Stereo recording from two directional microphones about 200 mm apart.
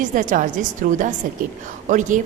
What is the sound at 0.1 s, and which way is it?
A woman's voice, 40° right (ahead or behind).